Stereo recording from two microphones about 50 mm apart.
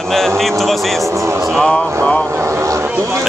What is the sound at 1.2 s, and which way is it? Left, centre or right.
Music, right.